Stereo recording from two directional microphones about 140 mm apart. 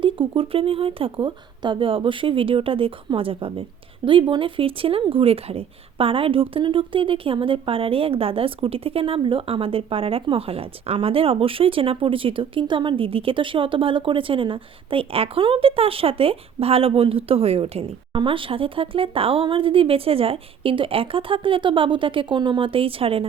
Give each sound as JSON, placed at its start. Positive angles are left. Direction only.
{"t": 0.0, "sound": "speech", "side_deg": -40}